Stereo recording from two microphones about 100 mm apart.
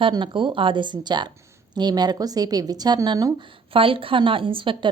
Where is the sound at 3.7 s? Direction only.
65° right (ahead or behind).